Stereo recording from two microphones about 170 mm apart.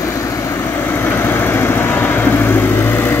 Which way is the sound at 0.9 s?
15° left (ahead or behind).